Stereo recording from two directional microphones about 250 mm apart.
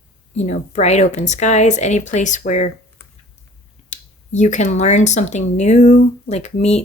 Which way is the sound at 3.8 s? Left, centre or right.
Left.